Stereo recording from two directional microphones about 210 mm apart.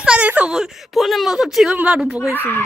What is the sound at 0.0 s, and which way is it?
A woman's voice, 5° right (ahead or behind).